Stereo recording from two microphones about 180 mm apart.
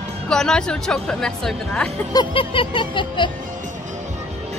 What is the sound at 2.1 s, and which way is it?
Music, 25° left (ahead or behind).